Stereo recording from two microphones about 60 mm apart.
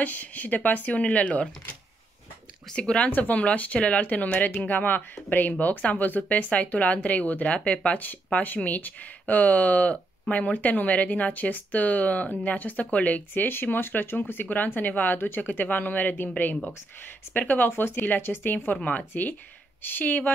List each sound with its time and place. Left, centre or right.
0.0 s speech: left
2.7 s speech: centre
3.1 s speech: left
18.8 s speech: left